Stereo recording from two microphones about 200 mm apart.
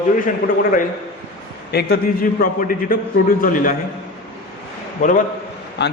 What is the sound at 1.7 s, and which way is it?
A man's voice, 45° left (ahead or behind).